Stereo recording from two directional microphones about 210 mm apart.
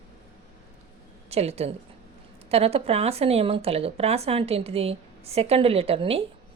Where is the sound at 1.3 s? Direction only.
30° right (ahead or behind).